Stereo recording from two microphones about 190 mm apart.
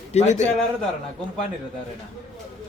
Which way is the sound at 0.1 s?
35° left (ahead or behind).